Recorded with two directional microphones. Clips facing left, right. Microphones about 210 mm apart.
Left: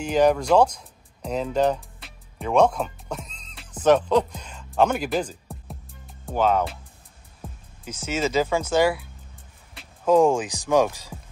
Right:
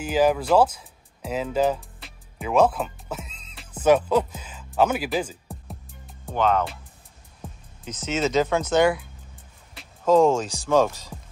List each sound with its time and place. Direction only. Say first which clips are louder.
0.0 s music: left 1 dB; 5° right (ahead or behind)
7.4 s speech: even; 5° left (ahead or behind)